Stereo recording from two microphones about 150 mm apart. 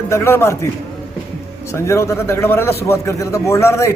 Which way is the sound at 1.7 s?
20° left (ahead or behind).